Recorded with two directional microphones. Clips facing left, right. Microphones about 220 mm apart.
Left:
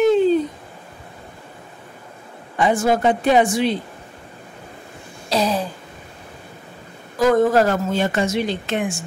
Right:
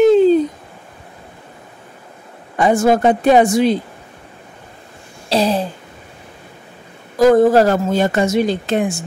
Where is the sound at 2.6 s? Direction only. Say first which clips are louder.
Right 4 dB; 45° right (ahead or behind).